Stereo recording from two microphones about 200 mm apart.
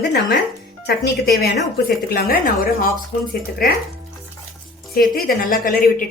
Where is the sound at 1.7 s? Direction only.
45° left (ahead or behind).